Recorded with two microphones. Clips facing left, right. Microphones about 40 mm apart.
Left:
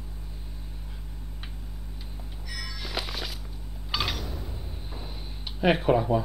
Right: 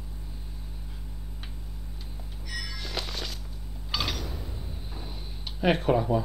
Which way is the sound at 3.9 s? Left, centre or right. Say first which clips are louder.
Left 1 dB; centre.